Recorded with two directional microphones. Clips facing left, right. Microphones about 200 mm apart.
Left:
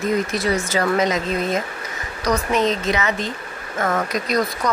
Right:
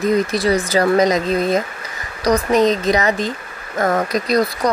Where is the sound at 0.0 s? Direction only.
35° right (ahead or behind).